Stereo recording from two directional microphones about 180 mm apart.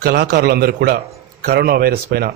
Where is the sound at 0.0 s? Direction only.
65° right (ahead or behind).